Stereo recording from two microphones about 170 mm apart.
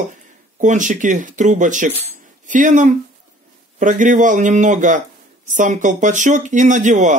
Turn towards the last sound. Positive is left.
turn(degrees=-45)  # may be behind; listen again after turning